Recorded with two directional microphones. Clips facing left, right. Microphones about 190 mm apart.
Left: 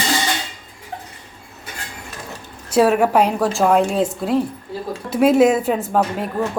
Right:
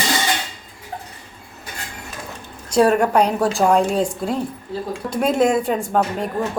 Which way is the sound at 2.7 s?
5° left (ahead or behind).